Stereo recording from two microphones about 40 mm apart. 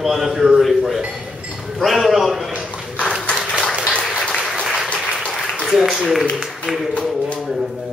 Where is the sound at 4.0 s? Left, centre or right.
Centre.